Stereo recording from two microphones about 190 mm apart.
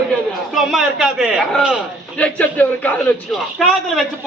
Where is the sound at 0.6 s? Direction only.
Centre (ahead or behind).